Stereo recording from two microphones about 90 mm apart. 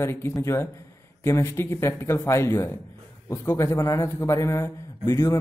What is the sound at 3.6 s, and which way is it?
A man's voice, 35° left (ahead or behind).